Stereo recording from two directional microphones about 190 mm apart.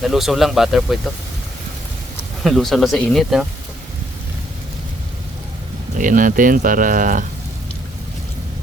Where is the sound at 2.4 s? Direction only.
Centre (ahead or behind).